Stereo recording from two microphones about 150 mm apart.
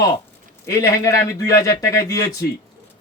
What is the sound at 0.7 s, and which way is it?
Speech, 20° left (ahead or behind).